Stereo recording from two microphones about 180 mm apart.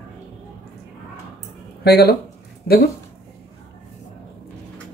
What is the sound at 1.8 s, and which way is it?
Speech, 65° left (ahead or behind).